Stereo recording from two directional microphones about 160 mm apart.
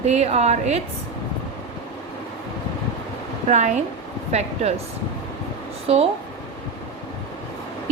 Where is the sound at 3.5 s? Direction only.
45° right (ahead or behind).